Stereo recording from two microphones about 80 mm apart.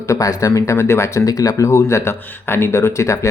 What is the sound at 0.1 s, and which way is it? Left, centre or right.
Speech, left.